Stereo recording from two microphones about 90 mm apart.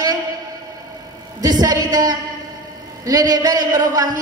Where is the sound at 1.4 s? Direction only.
45° right (ahead or behind).